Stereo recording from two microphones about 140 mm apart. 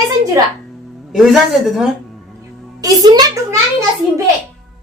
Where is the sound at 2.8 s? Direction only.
30° right (ahead or behind).